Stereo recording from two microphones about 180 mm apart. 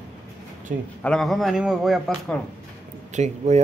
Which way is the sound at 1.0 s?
5° left (ahead or behind).